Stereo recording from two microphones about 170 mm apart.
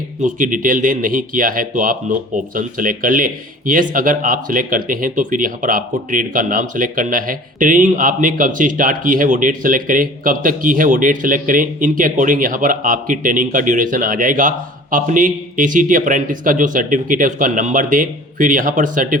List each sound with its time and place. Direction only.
0.2 s speech: 50° right (ahead or behind)